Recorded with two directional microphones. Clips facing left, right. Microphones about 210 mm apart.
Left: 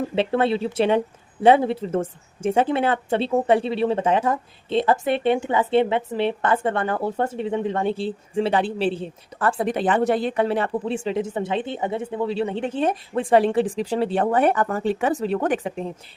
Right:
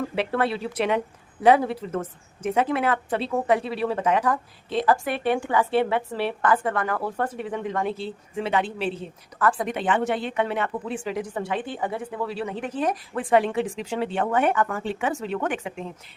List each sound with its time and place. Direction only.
0.2 s speech: 25° left (ahead or behind)